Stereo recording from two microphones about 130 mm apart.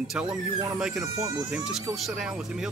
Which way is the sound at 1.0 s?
30° right (ahead or behind).